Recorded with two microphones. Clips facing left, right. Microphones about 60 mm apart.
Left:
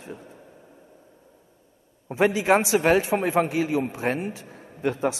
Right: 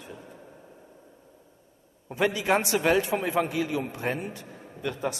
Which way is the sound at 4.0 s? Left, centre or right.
Left.